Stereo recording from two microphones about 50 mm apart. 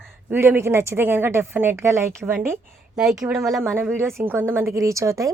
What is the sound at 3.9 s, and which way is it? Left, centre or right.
A woman's voice, right.